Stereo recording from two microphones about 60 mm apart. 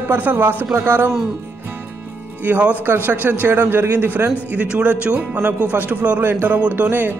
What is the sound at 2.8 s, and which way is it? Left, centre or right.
A man's voice, right.